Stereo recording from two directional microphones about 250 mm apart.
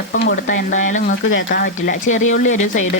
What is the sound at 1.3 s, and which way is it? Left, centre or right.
Speech, left.